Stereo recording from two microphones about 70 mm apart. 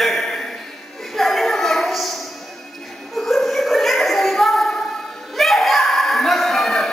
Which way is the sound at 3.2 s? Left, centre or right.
Centre.